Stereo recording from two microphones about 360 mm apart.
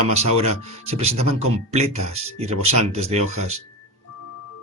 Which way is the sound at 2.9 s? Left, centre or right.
Centre.